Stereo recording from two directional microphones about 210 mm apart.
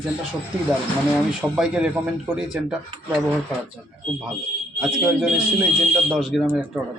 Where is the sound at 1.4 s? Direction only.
5° right (ahead or behind).